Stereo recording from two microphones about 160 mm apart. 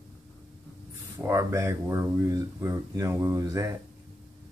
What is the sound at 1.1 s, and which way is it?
Speech, 20° right (ahead or behind).